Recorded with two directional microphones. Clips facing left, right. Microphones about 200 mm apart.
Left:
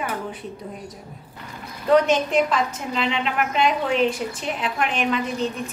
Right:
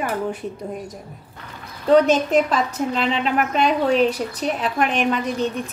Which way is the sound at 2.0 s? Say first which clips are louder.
Right 2 dB; 40° right (ahead or behind).